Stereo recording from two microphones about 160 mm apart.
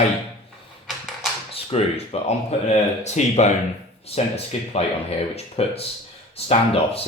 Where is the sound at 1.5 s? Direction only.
40° left (ahead or behind).